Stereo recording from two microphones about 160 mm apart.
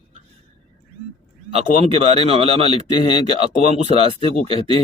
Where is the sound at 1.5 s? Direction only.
40° right (ahead or behind).